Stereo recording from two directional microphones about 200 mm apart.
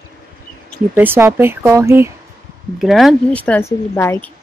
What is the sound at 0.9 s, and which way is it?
Speech, 10° right (ahead or behind).